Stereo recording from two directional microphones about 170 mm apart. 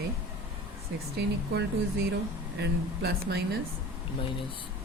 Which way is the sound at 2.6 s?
70° right (ahead or behind).